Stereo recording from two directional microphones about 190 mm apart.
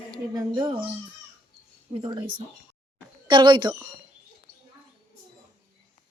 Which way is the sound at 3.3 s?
25° right (ahead or behind).